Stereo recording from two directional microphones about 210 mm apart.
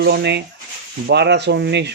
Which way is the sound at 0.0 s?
50° right (ahead or behind).